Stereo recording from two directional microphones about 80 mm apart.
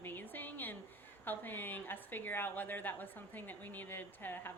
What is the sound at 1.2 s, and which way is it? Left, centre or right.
Speech, left.